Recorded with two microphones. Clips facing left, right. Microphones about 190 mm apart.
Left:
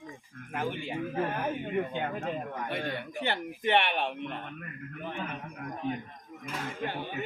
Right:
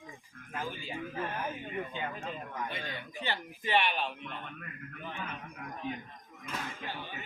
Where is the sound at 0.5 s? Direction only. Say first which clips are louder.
Left 6 dB; 65° left (ahead or behind).